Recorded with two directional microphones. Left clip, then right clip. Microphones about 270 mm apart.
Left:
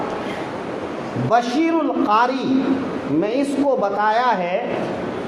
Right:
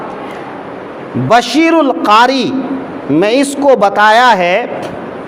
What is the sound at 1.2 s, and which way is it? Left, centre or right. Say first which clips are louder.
Speech: right 9 dB; right.